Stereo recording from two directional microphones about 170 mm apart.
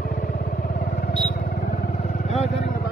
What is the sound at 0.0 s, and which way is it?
Vehicle, 55° left (ahead or behind).